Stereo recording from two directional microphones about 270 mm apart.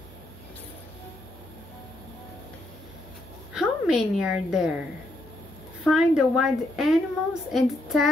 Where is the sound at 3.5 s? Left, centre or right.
Centre.